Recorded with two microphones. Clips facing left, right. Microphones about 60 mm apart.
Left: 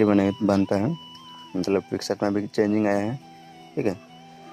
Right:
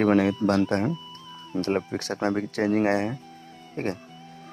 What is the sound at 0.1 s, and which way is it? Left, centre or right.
Speech, right.